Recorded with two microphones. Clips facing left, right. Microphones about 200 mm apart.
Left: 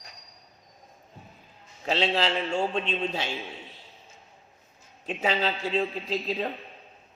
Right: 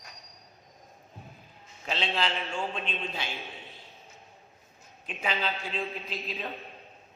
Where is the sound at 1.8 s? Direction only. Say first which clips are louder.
Left 5 dB; 40° left (ahead or behind).